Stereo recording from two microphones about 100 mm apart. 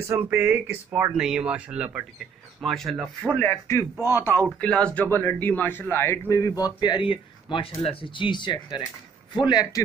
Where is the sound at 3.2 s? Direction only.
15° left (ahead or behind).